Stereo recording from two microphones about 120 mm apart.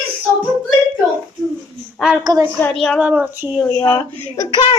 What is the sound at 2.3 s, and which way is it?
Speech, 35° right (ahead or behind).